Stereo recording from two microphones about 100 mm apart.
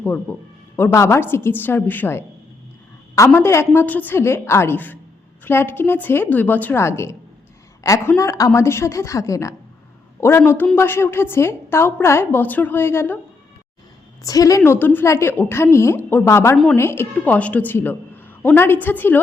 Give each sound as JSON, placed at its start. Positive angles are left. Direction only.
{"t": 0.3, "sound": "a man's voice", "side_deg": 20}
{"t": 14.3, "sound": "a woman's voice", "side_deg": 35}